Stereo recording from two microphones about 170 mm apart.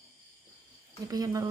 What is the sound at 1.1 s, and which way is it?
Speech, 20° right (ahead or behind).